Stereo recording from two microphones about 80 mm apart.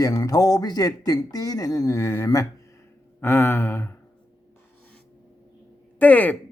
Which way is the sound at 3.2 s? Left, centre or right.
Left.